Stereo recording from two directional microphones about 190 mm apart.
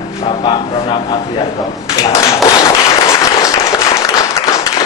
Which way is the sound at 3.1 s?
15° left (ahead or behind).